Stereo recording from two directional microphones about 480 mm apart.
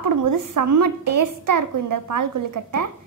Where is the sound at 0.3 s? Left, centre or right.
Right.